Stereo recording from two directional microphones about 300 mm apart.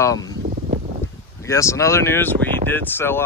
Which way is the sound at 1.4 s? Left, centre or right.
Centre.